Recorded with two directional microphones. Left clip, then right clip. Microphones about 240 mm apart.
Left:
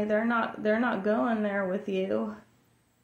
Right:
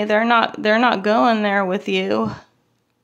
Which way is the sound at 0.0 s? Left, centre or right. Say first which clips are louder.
Right 11 dB; right.